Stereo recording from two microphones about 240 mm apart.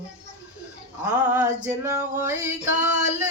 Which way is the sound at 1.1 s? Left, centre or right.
Centre.